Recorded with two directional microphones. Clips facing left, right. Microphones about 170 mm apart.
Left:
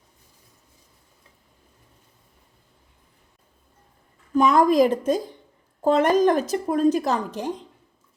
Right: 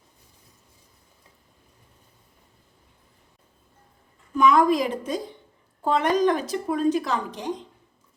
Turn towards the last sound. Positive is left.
turn(degrees=45)  # may be behind; listen again after turning